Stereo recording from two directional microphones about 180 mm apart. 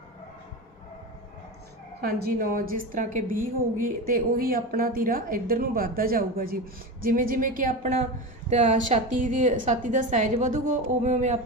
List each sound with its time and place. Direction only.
2.0 s a woman's voice: 55° right (ahead or behind)